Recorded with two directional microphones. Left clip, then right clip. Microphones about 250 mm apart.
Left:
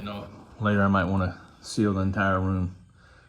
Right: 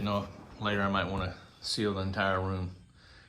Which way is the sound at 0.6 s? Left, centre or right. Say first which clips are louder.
Left 6 dB; centre.